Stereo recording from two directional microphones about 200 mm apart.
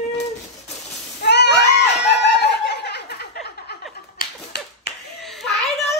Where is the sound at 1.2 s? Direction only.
60° left (ahead or behind).